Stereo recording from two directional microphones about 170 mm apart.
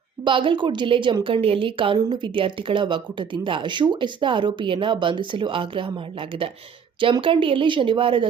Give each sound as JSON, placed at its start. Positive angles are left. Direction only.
{"t": 0.3, "sound": "a woman's voice", "side_deg": -30}